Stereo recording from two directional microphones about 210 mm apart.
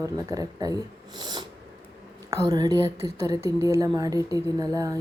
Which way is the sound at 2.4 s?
20° right (ahead or behind).